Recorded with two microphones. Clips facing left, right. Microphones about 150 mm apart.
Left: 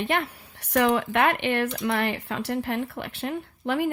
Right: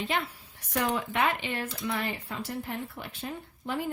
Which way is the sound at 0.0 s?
60° left (ahead or behind).